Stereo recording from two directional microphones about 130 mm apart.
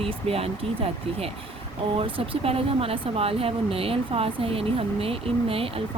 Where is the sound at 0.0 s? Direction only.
50° right (ahead or behind).